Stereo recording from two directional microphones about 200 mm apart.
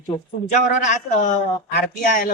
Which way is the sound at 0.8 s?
40° left (ahead or behind).